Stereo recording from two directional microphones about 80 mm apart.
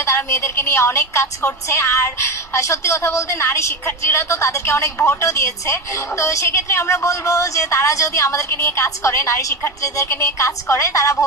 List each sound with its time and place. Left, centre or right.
0.0 s a woman's voice: left